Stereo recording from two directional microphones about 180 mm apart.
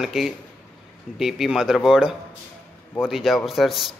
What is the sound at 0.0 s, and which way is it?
A man's voice, centre (ahead or behind).